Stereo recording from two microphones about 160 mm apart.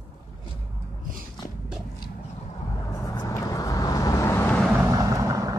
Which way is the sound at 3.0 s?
20° left (ahead or behind).